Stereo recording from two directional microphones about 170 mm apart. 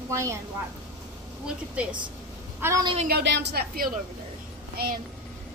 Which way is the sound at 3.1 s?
85° right.